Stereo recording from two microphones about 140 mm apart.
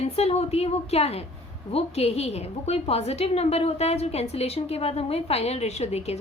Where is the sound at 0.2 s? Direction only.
45° left (ahead or behind).